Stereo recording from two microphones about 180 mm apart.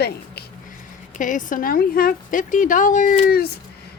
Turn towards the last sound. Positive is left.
turn(degrees=60)  # may be behind; listen again after turning